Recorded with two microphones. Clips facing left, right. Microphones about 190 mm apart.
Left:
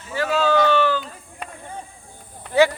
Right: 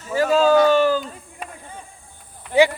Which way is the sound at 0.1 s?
45° right (ahead or behind).